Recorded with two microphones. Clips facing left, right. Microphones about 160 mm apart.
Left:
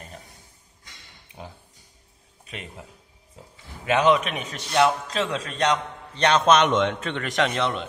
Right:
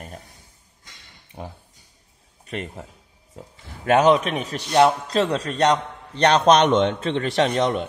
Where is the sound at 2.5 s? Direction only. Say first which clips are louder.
Right 8 dB; 50° right (ahead or behind).